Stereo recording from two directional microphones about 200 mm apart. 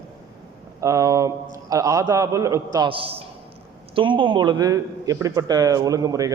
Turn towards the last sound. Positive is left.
turn(degrees=-15)  # may be behind; listen again after turning